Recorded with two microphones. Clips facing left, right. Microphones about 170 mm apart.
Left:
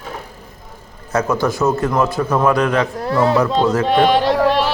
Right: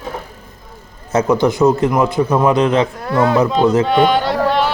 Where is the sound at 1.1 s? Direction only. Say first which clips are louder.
Right 4 dB; 20° right (ahead or behind).